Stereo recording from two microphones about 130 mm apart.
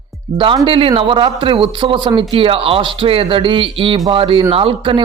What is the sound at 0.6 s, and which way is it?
A man's voice, 45° right (ahead or behind).